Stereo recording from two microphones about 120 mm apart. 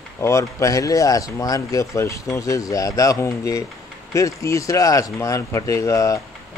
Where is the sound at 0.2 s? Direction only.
25° left (ahead or behind).